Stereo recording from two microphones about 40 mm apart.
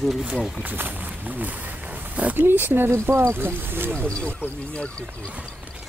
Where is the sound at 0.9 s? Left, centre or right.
Right.